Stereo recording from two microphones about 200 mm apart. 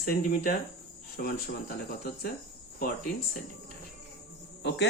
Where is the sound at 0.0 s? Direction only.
45° left (ahead or behind).